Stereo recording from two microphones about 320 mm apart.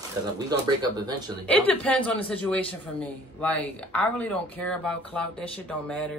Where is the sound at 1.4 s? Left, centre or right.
Centre.